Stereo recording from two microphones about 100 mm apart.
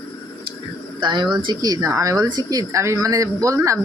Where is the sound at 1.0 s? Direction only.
50° right (ahead or behind).